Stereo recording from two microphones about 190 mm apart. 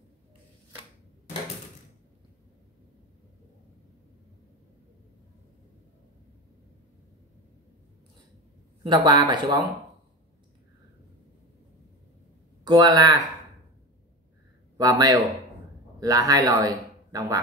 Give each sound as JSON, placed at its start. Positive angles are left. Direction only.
{"t": 8.8, "sound": "speech", "side_deg": -25}
{"t": 12.6, "sound": "speech", "side_deg": -20}
{"t": 14.8, "sound": "speech", "side_deg": -20}